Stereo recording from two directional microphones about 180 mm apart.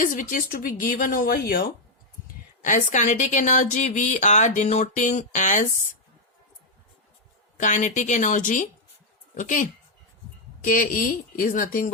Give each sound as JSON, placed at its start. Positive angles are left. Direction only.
{"t": 0.0, "sound": "speech", "side_deg": 45}
{"t": 2.6, "sound": "speech", "side_deg": 45}
{"t": 7.5, "sound": "a woman's voice", "side_deg": 45}